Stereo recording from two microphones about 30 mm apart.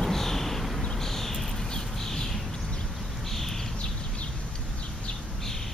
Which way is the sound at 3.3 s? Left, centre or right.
Centre.